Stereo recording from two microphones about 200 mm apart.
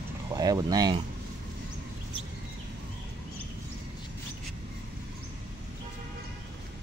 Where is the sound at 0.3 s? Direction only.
20° right (ahead or behind).